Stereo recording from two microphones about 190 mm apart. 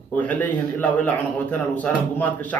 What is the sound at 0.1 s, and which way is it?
A man's voice, 10° left (ahead or behind).